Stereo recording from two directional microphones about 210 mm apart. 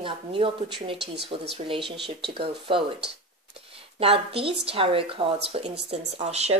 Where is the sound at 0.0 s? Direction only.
25° right (ahead or behind).